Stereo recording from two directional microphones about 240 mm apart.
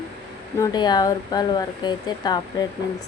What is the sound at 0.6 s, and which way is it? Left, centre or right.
Speech, centre.